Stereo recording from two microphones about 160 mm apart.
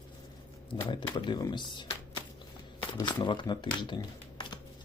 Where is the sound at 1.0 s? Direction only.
30° left (ahead or behind).